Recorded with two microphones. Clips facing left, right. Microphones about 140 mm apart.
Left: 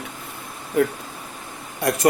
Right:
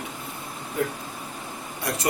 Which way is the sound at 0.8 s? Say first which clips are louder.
Left 7 dB; 60° left (ahead or behind).